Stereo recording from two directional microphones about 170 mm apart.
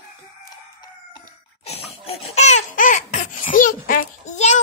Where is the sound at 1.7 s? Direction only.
35° left (ahead or behind).